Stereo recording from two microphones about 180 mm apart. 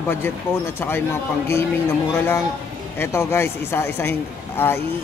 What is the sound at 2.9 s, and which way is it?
Speech, 15° left (ahead or behind).